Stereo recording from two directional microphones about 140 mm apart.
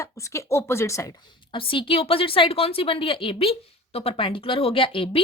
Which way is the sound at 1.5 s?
40° left (ahead or behind).